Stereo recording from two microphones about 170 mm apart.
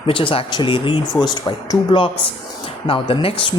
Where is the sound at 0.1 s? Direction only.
30° left (ahead or behind).